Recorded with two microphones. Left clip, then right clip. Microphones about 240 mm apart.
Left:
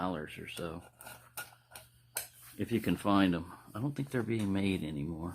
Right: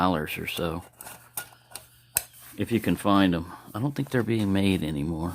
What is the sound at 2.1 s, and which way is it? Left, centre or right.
Speech, right.